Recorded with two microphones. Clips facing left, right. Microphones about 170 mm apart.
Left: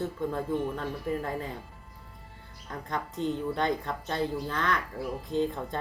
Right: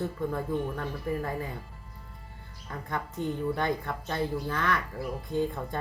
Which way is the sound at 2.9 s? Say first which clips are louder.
Left 1 dB; 20° left (ahead or behind).